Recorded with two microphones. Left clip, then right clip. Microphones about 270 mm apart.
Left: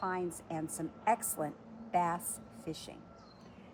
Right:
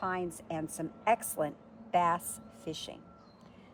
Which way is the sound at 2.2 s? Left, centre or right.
Right.